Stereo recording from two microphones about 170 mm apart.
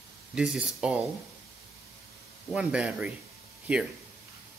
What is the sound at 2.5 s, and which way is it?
Speech, 5° right (ahead or behind).